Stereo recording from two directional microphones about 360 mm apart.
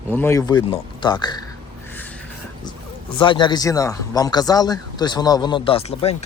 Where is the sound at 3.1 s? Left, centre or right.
Centre.